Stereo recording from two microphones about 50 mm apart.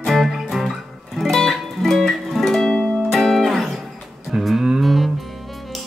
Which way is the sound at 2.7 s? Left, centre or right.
Centre.